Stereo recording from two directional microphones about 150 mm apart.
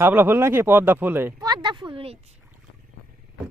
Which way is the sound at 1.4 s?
30° right (ahead or behind).